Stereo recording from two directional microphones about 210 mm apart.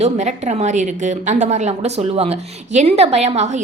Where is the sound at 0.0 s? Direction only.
35° right (ahead or behind).